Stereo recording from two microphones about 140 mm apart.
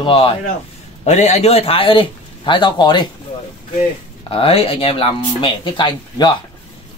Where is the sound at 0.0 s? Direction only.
40° left (ahead or behind).